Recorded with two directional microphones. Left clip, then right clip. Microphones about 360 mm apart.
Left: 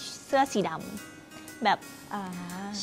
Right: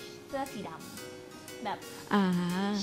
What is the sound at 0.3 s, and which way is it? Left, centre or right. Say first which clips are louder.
Speech: left 12 dB; left.